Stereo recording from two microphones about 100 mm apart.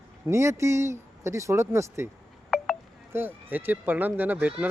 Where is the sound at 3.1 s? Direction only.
20° right (ahead or behind).